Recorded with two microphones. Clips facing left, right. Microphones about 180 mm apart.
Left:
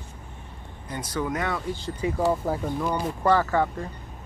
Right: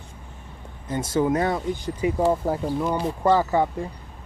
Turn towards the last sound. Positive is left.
turn(degrees=-15)  # may be behind; listen again after turning